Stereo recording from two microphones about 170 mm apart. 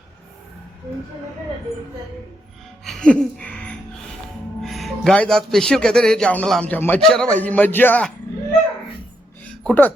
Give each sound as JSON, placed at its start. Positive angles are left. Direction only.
{"t": 2.8, "sound": "a sound", "side_deg": 5}
{"t": 4.6, "sound": "a man's voice", "side_deg": 0}
{"t": 9.6, "sound": "speech", "side_deg": 10}